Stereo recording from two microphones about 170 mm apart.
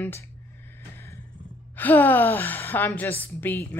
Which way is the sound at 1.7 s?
10° left (ahead or behind).